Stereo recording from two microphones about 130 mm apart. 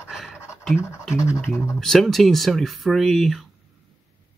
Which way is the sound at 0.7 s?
20° left (ahead or behind).